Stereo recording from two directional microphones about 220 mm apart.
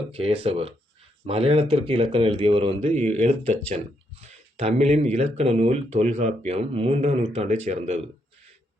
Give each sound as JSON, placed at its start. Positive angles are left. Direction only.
{"t": 0.1, "sound": "speech", "side_deg": -25}